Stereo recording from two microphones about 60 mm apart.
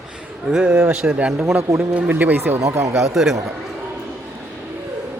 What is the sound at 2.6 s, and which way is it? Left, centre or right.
Speech, right.